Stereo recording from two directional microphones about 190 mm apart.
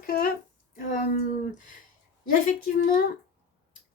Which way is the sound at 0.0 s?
50° left (ahead or behind).